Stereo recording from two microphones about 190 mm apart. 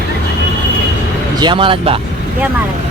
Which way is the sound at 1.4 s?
25° right (ahead or behind).